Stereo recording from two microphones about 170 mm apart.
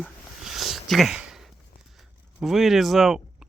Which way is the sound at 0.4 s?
Centre (ahead or behind).